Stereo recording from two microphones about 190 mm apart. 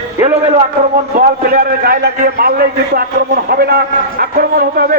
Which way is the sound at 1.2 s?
50° right (ahead or behind).